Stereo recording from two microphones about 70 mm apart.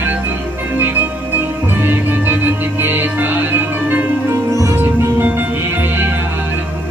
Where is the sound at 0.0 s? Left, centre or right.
Right.